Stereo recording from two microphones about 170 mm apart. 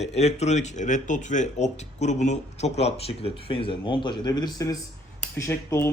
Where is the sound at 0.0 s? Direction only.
40° left (ahead or behind).